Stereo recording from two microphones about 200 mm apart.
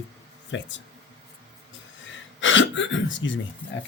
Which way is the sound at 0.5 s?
65° left (ahead or behind).